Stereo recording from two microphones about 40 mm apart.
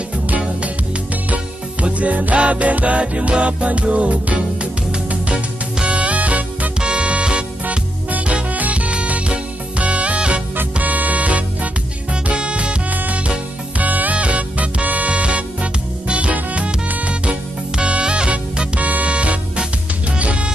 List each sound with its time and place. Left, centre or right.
1.3 s music: right
5.9 s music: right
6.8 s music: right
10.5 s music: right
12.9 s music: right
18.8 s music: right